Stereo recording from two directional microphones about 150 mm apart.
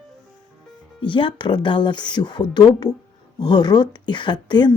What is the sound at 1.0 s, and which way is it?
Speech, 35° left (ahead or behind).